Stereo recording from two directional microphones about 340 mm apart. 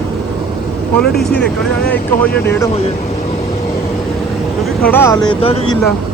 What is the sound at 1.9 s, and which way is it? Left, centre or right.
Speech, centre.